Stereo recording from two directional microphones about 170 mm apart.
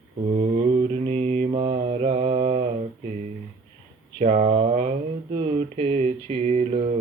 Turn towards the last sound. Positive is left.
turn(degrees=-40)  # may be behind; listen again after turning